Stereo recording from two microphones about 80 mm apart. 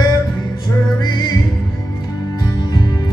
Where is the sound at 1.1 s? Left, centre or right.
Left.